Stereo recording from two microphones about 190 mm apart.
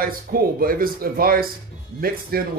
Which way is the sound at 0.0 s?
50° right (ahead or behind).